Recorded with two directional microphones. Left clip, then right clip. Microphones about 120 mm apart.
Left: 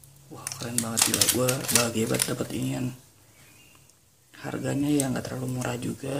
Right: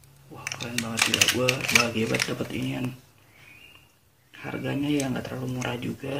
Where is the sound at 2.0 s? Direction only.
15° left (ahead or behind).